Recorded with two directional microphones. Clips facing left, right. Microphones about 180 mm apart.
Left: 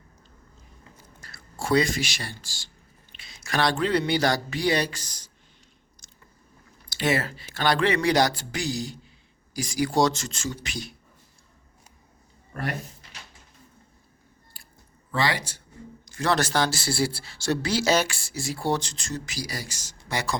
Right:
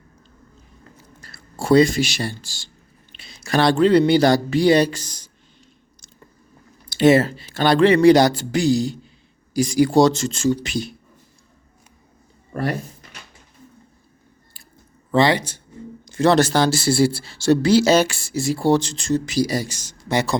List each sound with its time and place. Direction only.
1.2 s speech: 30° right (ahead or behind)
6.0 s biting: 20° right (ahead or behind)
6.9 s speech: 25° right (ahead or behind)
15.1 s speech: 25° right (ahead or behind)